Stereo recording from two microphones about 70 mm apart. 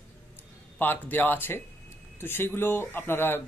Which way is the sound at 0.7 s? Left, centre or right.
Left.